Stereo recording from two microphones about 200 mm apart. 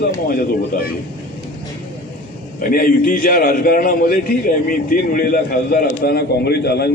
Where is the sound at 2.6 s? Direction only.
45° left (ahead or behind).